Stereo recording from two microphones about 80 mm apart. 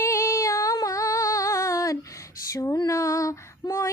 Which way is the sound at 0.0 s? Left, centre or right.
Left.